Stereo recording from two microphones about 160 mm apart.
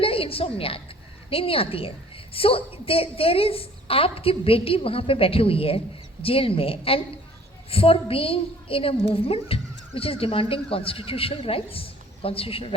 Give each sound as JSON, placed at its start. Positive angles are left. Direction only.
{"t": 0.0, "sound": "a woman's voice", "side_deg": 35}